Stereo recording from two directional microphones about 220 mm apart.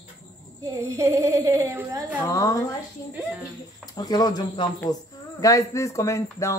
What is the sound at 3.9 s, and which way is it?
Speech, 20° left (ahead or behind).